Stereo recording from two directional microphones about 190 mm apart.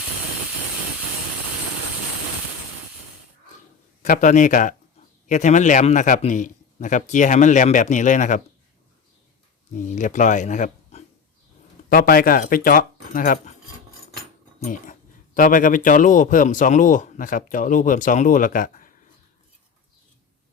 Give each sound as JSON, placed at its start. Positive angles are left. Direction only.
{"t": 4.0, "sound": "a man's voice", "side_deg": 45}
{"t": 9.7, "sound": "a man's voice", "side_deg": 40}
{"t": 14.6, "sound": "a man's voice", "side_deg": 45}